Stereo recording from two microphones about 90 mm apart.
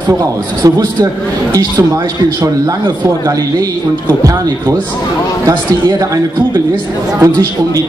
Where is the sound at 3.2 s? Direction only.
40° right (ahead or behind).